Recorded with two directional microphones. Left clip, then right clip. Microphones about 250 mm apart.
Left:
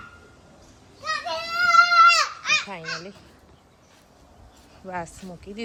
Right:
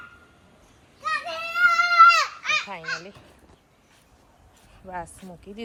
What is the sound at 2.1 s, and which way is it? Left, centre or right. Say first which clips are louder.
Children playing: left 1 dB; right.